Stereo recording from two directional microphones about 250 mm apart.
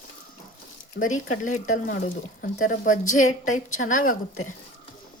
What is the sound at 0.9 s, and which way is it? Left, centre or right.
Speech, left.